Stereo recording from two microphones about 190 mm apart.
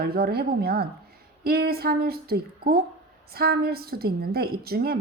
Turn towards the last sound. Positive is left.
turn(degrees=-55)  # may be behind; listen again after turning